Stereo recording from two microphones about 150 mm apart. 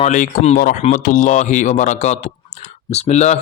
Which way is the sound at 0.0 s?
50° left (ahead or behind).